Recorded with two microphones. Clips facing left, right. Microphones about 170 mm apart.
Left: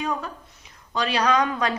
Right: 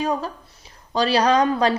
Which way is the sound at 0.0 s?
35° right (ahead or behind).